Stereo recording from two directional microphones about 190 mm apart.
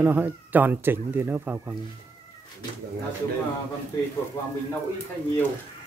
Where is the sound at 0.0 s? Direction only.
10° right (ahead or behind).